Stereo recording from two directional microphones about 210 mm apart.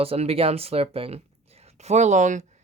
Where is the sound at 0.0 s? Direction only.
30° right (ahead or behind).